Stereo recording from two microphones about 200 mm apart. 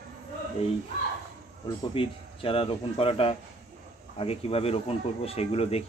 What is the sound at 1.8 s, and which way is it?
Speech, 25° left (ahead or behind).